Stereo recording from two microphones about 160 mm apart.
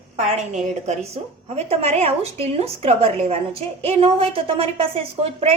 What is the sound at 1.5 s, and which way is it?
A woman's voice, 40° right (ahead or behind).